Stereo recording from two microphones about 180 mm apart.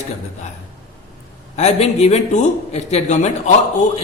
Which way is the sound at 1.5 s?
35° left (ahead or behind).